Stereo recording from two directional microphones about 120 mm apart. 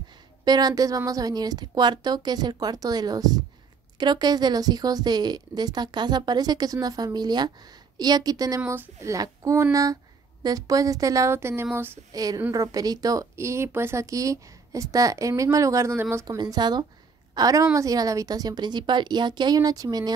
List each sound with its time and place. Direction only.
0.5 s speech: 35° right (ahead or behind); by 12.0 s 20° right (ahead or behind)
12.1 s speech: 30° right (ahead or behind)
16.3 s a woman's voice: 35° right (ahead or behind)